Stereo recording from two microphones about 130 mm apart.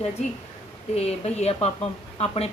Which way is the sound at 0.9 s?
55° left (ahead or behind).